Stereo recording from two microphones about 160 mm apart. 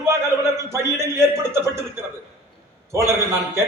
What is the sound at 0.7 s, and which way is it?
A man's voice, 15° right (ahead or behind).